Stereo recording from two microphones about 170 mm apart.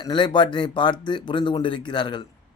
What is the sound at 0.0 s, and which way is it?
A man's voice, 25° left (ahead or behind).